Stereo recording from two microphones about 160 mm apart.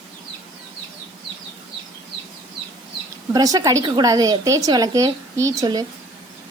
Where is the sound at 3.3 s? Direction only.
20° right (ahead or behind).